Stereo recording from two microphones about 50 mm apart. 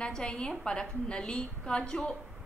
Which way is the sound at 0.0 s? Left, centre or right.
Centre.